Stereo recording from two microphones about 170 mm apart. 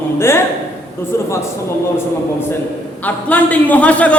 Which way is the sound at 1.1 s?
15° left (ahead or behind).